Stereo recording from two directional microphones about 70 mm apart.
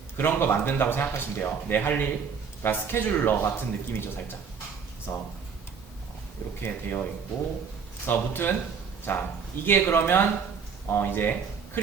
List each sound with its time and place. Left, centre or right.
0.2 s speech: left
6.6 s speech: left